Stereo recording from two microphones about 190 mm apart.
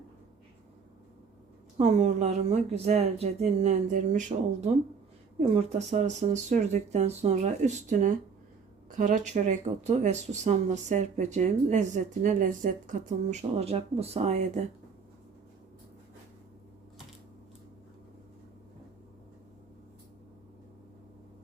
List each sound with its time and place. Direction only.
1.8 s speech: 35° right (ahead or behind)